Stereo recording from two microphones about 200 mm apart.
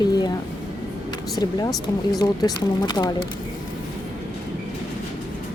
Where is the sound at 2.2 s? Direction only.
20° left (ahead or behind).